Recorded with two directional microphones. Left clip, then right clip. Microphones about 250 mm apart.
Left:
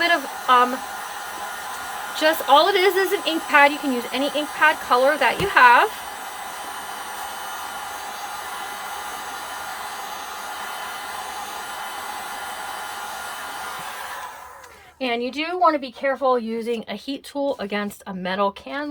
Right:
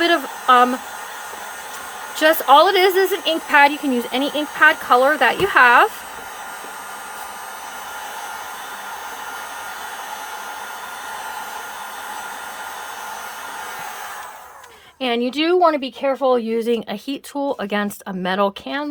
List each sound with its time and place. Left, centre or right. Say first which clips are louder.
0.0 s hair dryer: right 3 dB; right
2.1 s speech: right 4 dB; centre
15.0 s speech: right 5 dB; centre